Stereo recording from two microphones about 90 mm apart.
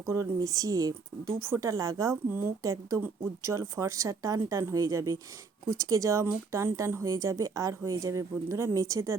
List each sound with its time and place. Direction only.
0.0 s speech: 35° right (ahead or behind)